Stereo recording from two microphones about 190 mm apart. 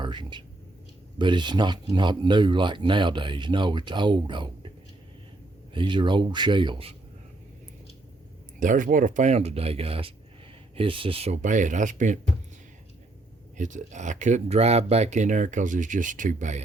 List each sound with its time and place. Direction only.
0.0 s speech: 25° right (ahead or behind)
5.7 s speech: 25° right (ahead or behind)
8.5 s speech: 45° right (ahead or behind)
13.6 s speech: 40° right (ahead or behind)